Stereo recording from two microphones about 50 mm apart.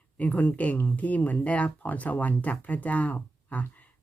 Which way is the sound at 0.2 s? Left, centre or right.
Left.